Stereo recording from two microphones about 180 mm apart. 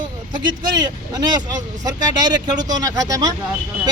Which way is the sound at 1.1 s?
20° right (ahead or behind).